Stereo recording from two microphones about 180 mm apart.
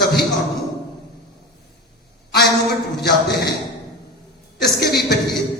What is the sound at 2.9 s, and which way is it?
Speech, 60° left (ahead or behind).